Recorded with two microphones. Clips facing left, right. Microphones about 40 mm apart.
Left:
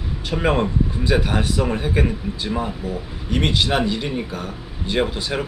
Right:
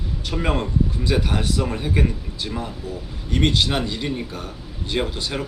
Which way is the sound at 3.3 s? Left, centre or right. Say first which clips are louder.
Left 1 dB; centre.